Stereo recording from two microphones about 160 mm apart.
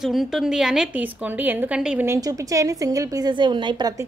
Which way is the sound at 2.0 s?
20° right (ahead or behind).